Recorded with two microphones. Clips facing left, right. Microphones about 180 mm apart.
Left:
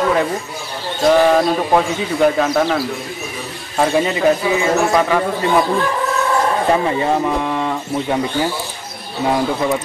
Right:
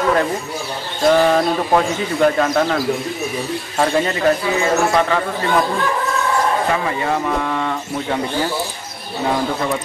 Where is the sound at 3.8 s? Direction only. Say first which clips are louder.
Left 2 dB; 10° left (ahead or behind).